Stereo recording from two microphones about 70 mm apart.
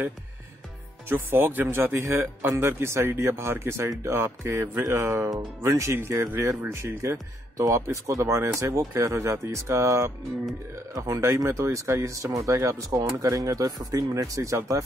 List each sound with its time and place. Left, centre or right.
1.0 s speech: right